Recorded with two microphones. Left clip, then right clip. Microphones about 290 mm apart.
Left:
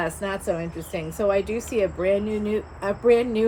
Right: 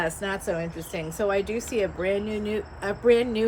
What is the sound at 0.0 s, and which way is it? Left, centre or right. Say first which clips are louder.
A woman's voice: left 1 dB; centre.